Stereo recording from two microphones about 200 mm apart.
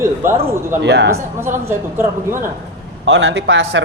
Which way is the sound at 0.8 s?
60° right (ahead or behind).